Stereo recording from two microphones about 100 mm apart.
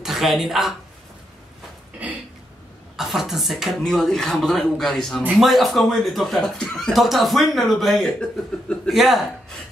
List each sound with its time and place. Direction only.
0.0 s speech: 5° right (ahead or behind)
3.0 s speech: 5° right (ahead or behind)